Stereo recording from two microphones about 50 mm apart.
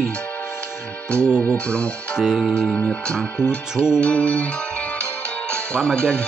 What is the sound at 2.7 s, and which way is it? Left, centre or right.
Speech, left.